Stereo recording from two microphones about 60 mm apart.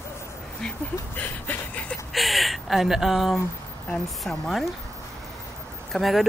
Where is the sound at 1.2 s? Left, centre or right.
Left.